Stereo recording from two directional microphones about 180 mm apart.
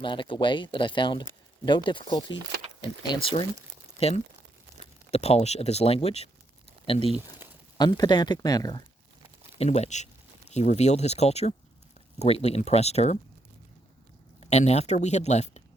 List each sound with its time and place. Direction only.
0.0 s speech: 25° left (ahead or behind)
5.1 s speech: 35° left (ahead or behind)
9.6 s speech: 35° left (ahead or behind)
14.4 s speech: 40° left (ahead or behind)